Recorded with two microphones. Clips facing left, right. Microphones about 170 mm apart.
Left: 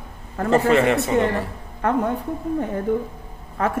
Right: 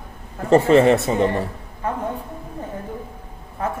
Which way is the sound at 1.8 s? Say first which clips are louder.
Left 5 dB; 75° left (ahead or behind).